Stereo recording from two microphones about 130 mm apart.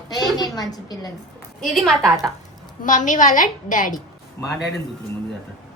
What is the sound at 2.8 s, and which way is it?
A woman's voice, 75° left (ahead or behind).